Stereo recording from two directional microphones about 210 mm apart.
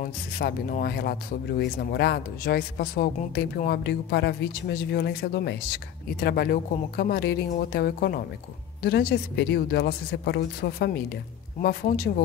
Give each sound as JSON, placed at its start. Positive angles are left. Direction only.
{"t": 0.0, "sound": "speech", "side_deg": 45}